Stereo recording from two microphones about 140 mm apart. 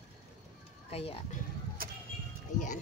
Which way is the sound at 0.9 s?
45° left (ahead or behind).